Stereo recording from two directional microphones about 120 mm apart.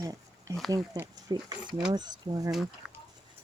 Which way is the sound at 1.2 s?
35° right (ahead or behind).